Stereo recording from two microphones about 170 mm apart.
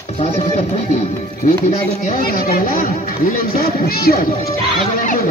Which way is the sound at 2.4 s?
55° left (ahead or behind).